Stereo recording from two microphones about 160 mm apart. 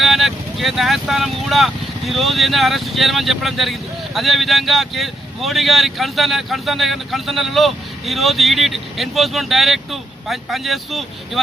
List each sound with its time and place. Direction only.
0.0 s speech: centre (ahead or behind)